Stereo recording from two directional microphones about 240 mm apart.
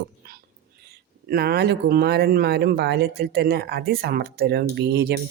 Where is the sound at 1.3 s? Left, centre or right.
Right.